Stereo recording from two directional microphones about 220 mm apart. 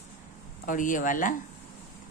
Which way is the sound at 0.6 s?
35° left (ahead or behind).